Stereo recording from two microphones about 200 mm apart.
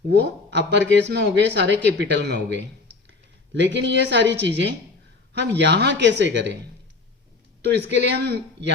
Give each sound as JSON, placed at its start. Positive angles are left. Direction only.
{"t": 0.1, "sound": "a woman's voice", "side_deg": -60}
{"t": 7.9, "sound": "speech", "side_deg": -60}